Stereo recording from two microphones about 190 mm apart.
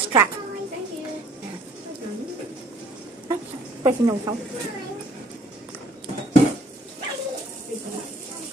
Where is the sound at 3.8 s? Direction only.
15° right (ahead or behind).